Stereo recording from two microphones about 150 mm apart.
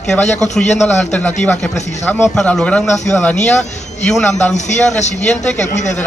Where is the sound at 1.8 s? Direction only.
50° left (ahead or behind).